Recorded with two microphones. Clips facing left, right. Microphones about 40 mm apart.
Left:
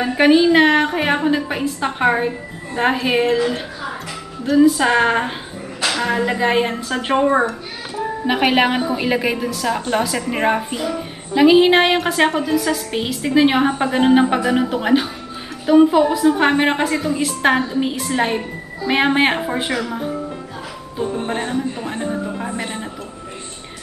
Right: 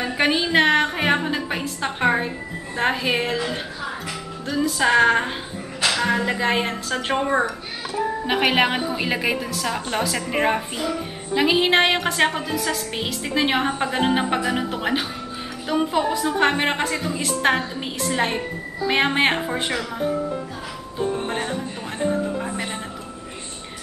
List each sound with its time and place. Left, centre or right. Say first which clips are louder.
0.0 s a woman's voice: left 8 dB; centre
21.3 s speech: left 4 dB; centre